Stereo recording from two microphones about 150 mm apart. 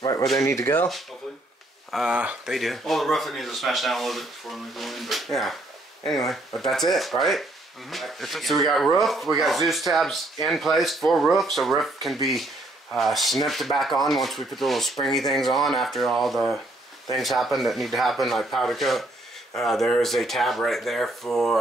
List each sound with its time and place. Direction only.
0.0 s speech: 25° left (ahead or behind)
1.9 s speech: 5° right (ahead or behind)